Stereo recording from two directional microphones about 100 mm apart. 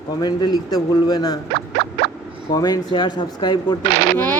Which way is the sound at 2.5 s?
40° left (ahead or behind).